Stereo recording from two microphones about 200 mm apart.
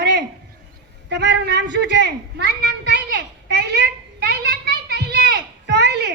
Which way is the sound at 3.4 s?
55° right (ahead or behind).